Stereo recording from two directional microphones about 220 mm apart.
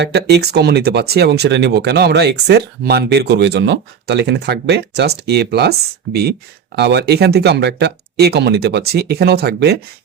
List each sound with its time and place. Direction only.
0.0 s speech: 50° right (ahead or behind)
6.7 s speech: 50° right (ahead or behind)